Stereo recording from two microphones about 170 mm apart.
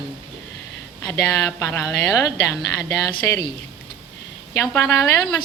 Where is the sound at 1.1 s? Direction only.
20° left (ahead or behind).